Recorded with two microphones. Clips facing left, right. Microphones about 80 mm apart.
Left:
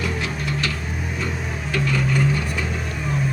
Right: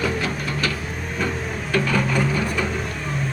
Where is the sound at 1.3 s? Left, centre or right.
Centre.